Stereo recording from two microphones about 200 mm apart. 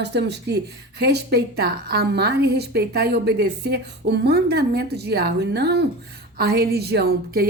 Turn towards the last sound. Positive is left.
turn(degrees=-50)  # may be behind; listen again after turning